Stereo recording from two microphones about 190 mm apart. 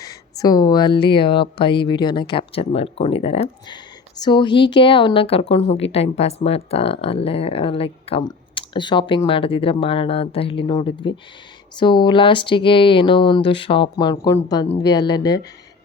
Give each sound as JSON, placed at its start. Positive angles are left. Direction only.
{"t": 0.0, "sound": "a woman's voice", "side_deg": 20}